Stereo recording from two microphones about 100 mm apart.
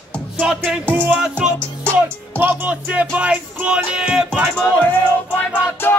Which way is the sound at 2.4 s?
20° right (ahead or behind).